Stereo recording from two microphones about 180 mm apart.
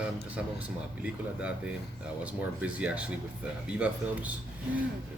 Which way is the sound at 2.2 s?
5° right (ahead or behind).